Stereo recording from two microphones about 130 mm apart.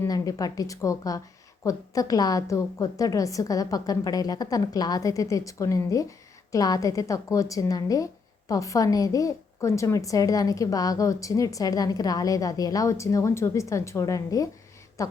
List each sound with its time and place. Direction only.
0.0 s a woman's voice: 25° left (ahead or behind)